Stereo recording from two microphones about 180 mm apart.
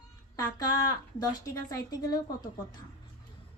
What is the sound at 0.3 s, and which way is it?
Speech, 20° left (ahead or behind).